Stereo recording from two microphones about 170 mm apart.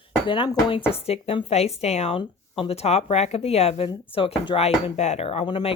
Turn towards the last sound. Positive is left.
turn(degrees=30)  # may be behind; listen again after turning